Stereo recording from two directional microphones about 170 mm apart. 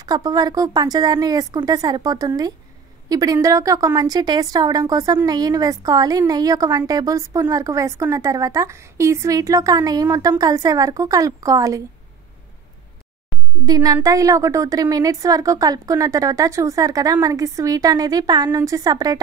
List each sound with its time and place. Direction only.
0.0 s a woman's voice: 25° right (ahead or behind)
13.7 s a woman's voice: 20° right (ahead or behind)